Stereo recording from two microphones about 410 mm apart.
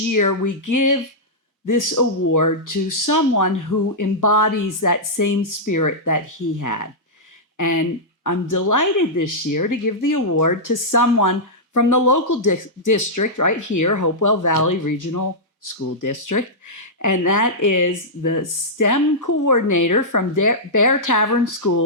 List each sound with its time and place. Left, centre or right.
0.1 s speech: left